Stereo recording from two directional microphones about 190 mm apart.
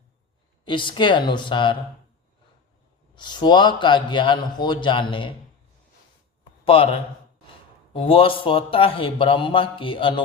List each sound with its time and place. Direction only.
0.6 s speech: 25° left (ahead or behind)
3.2 s speech: 25° left (ahead or behind)
6.4 s a sound: 30° left (ahead or behind)
7.9 s speech: 30° left (ahead or behind)